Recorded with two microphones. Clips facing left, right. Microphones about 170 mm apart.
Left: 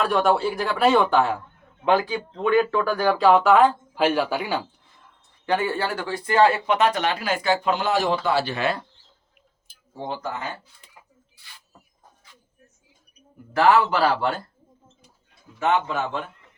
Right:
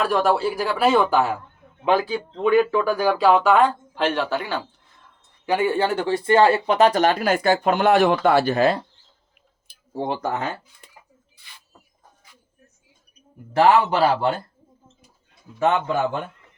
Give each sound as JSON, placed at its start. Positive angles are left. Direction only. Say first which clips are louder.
{"t": 0.0, "sound": "speech", "louder": "right 1 dB", "side_deg": 0}
{"t": 5.5, "sound": "speech", "louder": "right 3 dB", "side_deg": -15}
{"t": 9.6, "sound": "speech", "louder": "right 5 dB", "side_deg": -65}
{"t": 13.6, "sound": "speech", "louder": "right 2 dB", "side_deg": -25}